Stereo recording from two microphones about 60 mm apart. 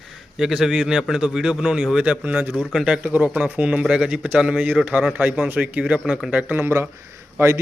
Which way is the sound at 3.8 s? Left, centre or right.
Centre.